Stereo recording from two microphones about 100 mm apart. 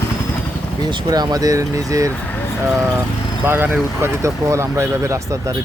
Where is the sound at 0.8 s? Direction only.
45° right (ahead or behind).